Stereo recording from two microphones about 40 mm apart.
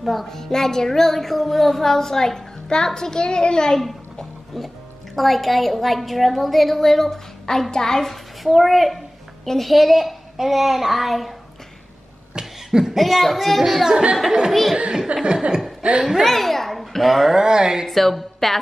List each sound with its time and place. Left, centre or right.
0.0 s a woman's voice: centre
3.8 s music: centre
5.1 s a woman's voice: centre
8.5 s a child's voice: centre
12.4 s cough: centre
12.9 s a woman's voice: centre
15.1 s chuckle: right
16.0 s speech: centre
16.3 s a child's voice: centre
17.4 s speech: centre
17.8 s speech: centre